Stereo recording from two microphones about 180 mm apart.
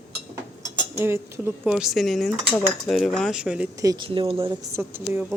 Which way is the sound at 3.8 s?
20° right (ahead or behind).